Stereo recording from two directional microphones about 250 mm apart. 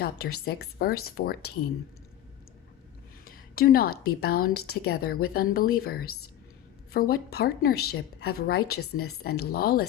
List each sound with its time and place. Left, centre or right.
0.0 s a woman's voice: left
3.2 s a woman's voice: left